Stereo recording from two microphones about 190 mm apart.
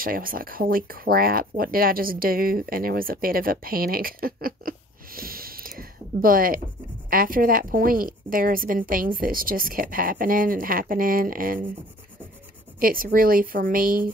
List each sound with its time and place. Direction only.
0.0 s speech: 50° right (ahead or behind)
12.8 s speech: 50° right (ahead or behind)